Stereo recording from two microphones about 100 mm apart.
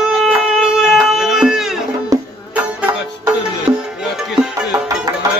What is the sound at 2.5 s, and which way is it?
Music, 15° right (ahead or behind).